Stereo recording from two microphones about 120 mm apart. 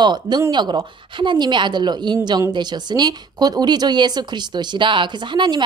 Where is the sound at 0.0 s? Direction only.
35° right (ahead or behind).